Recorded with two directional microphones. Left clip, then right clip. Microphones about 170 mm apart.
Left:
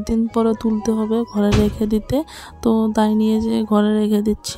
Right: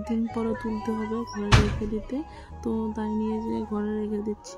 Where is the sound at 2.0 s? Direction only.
50° left (ahead or behind).